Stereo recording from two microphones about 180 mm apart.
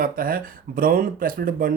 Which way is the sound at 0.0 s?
55° right (ahead or behind).